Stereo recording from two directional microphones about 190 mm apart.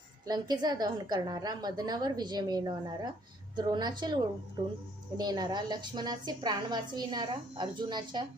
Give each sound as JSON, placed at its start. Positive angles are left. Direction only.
{"t": 0.3, "sound": "a woman's voice", "side_deg": -20}